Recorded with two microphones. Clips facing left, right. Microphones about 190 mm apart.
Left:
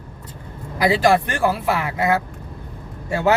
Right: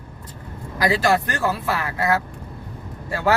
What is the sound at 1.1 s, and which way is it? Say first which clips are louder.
Speech: left 3 dB; 25° left (ahead or behind).